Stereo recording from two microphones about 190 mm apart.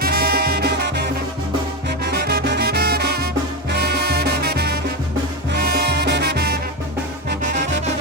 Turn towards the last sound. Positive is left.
turn(degrees=-60)  # may be behind; listen again after turning